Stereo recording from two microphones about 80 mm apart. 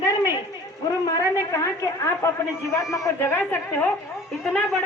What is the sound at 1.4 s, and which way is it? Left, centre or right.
A woman's voice, left.